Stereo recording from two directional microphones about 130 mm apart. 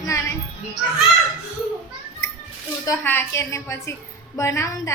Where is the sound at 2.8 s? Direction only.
15° left (ahead or behind).